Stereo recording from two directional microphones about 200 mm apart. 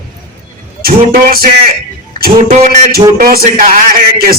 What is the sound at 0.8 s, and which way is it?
Speech, 45° right (ahead or behind).